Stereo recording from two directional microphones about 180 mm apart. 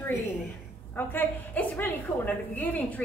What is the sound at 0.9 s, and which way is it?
A woman's voice, 10° left (ahead or behind).